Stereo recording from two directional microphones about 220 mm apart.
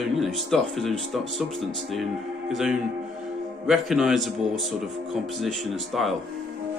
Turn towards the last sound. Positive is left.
turn(degrees=0)  # may be behind; listen again after turning